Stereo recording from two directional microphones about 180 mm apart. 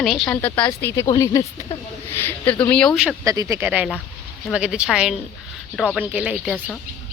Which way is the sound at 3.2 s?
20° right (ahead or behind).